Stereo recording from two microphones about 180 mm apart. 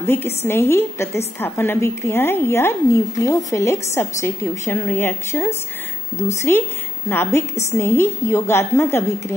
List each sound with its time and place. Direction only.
0.0 s a woman's voice: 10° left (ahead or behind)